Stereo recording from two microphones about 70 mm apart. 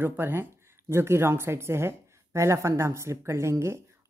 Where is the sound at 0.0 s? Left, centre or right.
Right.